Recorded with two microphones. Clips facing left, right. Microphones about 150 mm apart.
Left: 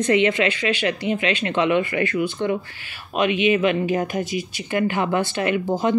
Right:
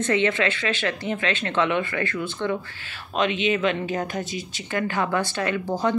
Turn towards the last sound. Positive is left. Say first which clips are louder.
# left 3 dB
turn(degrees=15)  # may be behind; listen again after turning